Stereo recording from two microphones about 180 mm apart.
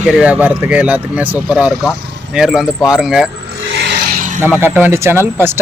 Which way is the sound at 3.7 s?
75° right (ahead or behind).